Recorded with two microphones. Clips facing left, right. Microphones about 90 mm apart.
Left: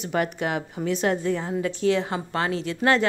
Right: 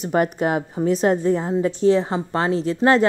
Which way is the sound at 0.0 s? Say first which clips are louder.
Right 6 dB; 40° right (ahead or behind).